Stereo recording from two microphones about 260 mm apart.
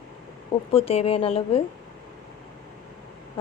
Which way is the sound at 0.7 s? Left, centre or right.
Left.